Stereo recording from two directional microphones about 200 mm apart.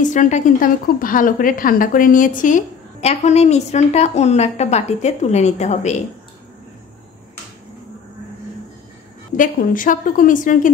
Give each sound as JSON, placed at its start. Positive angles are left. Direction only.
{"t": 0.0, "sound": "a woman's voice", "side_deg": 40}
{"t": 9.4, "sound": "a woman's voice", "side_deg": 40}